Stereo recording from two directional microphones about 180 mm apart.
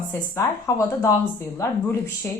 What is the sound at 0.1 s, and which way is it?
A woman's voice, 15° left (ahead or behind).